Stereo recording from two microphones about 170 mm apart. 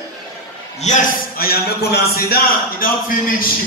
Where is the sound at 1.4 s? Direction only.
65° left (ahead or behind).